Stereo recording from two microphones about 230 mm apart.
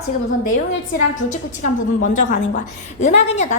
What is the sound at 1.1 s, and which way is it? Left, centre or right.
A woman's voice, left.